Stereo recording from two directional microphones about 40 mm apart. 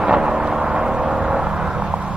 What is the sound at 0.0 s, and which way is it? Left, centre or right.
Vehicle, centre.